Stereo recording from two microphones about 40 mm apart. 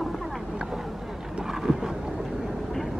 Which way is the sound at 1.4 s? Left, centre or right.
Centre.